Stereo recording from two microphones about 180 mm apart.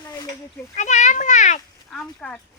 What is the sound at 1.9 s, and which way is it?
Speech, 5° left (ahead or behind).